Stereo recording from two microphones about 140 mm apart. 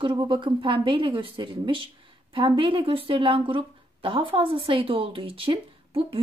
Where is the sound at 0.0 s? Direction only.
35° right (ahead or behind).